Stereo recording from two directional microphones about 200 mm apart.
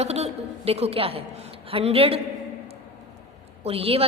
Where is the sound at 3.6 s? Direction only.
30° right (ahead or behind).